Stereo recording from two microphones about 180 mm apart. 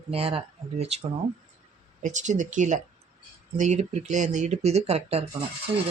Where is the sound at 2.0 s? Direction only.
45° right (ahead or behind).